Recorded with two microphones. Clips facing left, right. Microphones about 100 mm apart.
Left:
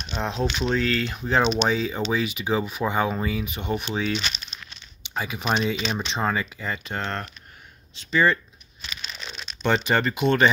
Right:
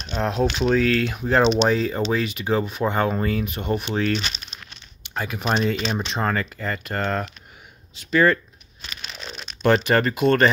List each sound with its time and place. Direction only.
0.0 s speech: 5° right (ahead or behind)
8.8 s a sound: 50° right (ahead or behind)
9.3 s speech: 5° right (ahead or behind)